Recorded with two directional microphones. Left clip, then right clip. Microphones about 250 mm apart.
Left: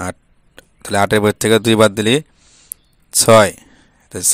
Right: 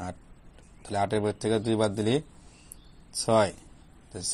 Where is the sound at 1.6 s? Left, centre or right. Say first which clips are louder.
Left 14 dB; left.